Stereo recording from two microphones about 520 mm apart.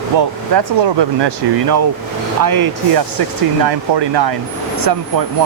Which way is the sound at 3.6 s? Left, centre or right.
Right.